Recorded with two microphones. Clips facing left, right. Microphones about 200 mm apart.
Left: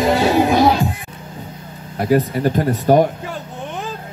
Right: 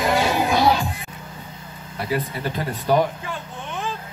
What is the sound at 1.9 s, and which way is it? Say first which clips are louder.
Speech: left 9 dB; 45° left (ahead or behind).